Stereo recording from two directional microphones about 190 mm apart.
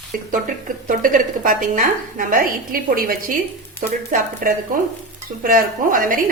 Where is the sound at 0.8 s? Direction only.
45° right (ahead or behind).